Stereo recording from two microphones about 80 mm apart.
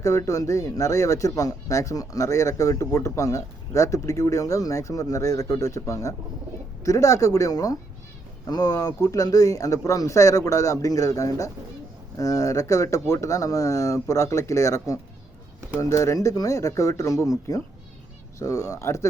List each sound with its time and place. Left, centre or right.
0.0 s speech: left